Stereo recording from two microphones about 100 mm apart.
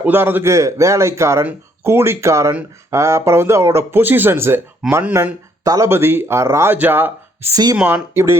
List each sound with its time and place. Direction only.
0.0 s speech: 20° right (ahead or behind)
0.5 s speech: 30° right (ahead or behind)
5.6 s speech: 35° right (ahead or behind)
5.9 s speech: 25° right (ahead or behind)
7.5 s speech: 40° right (ahead or behind)
8.1 s speech: 25° right (ahead or behind)